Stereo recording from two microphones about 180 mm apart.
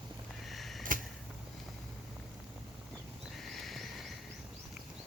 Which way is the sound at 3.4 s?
Centre (ahead or behind).